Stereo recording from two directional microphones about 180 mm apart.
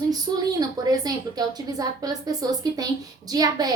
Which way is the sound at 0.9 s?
20° right (ahead or behind).